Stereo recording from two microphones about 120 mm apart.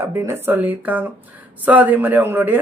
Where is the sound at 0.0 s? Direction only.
25° right (ahead or behind).